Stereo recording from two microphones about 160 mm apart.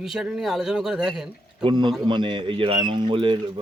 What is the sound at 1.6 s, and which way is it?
A man's voice, 30° right (ahead or behind).